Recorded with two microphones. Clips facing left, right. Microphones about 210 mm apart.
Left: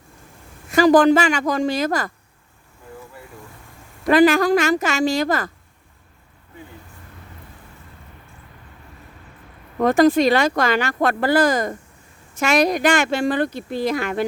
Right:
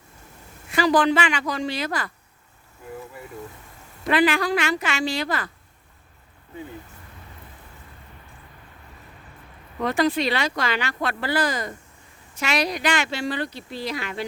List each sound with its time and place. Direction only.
0.7 s speech: 45° left (ahead or behind)
4.1 s speech: 45° left (ahead or behind)
9.7 s speech: 45° left (ahead or behind)